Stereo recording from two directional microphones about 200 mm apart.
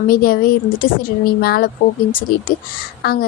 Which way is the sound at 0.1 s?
45° left (ahead or behind).